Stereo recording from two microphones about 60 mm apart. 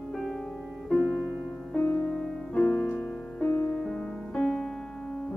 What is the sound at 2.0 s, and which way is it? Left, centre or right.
Music, centre.